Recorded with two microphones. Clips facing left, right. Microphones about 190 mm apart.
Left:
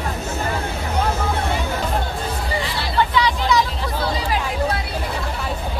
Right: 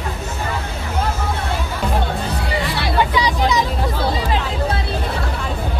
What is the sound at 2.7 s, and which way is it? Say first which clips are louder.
Hubbub: right 4 dB; 65° right (ahead or behind).